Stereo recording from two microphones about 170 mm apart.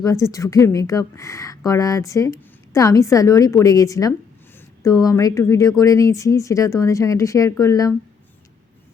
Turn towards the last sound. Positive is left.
turn(degrees=20)  # may be behind; listen again after turning